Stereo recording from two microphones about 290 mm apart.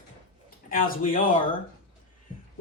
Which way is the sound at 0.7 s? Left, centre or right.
Left.